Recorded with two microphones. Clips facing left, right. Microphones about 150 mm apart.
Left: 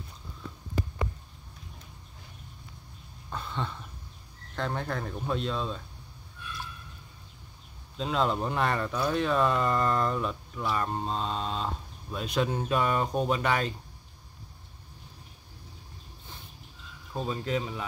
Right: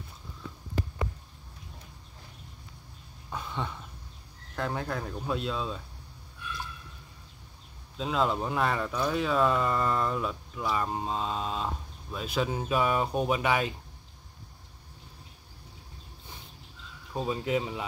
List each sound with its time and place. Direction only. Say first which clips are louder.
3.3 s a sound: even; 10° right (ahead or behind)
4.6 s speech: even; 5° right (ahead or behind)
8.0 s speech: even; centre (ahead or behind)
17.1 s speech: right 2 dB; 15° right (ahead or behind)